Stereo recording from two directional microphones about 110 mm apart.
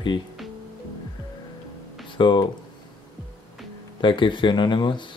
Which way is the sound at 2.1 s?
45° left (ahead or behind).